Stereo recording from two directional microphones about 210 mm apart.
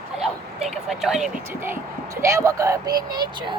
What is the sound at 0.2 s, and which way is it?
Speech, centre (ahead or behind).